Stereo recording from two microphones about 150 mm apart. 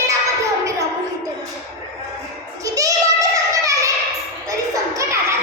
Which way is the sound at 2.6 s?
20° right (ahead or behind).